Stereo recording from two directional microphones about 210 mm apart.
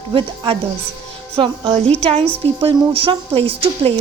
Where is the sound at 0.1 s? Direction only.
25° right (ahead or behind).